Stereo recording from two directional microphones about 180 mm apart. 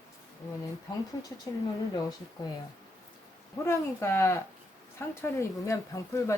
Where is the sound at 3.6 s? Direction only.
15° left (ahead or behind).